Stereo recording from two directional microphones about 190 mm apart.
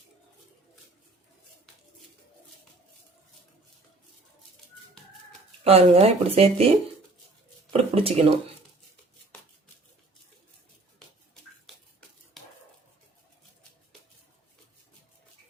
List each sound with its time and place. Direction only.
5.6 s speech: 30° right (ahead or behind)
7.7 s speech: 30° right (ahead or behind)
11.6 s a sound: centre (ahead or behind)